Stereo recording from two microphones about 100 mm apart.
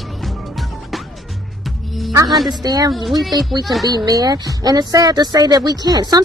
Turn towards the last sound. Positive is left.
turn(degrees=-40)  # may be behind; listen again after turning